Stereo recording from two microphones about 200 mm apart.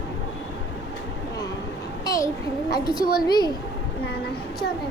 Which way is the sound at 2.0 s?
15° left (ahead or behind).